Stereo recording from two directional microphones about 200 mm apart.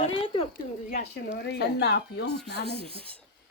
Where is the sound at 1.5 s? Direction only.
55° left (ahead or behind).